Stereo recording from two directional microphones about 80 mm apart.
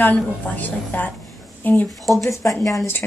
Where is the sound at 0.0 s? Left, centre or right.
Left.